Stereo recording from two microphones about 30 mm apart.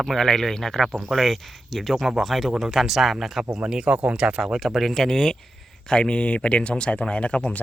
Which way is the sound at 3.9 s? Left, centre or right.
Right.